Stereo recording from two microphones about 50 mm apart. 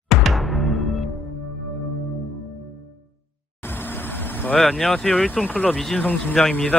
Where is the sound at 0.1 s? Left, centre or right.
Centre.